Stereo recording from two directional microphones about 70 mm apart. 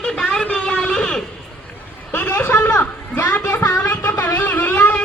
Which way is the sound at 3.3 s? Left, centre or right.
Left.